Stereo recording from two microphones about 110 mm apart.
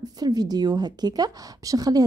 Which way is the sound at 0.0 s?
35° right (ahead or behind).